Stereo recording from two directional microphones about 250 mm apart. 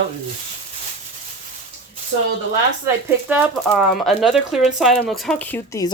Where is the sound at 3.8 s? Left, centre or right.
Centre.